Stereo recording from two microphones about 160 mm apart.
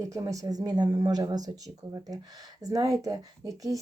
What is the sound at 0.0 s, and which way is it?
Speech, 20° right (ahead or behind).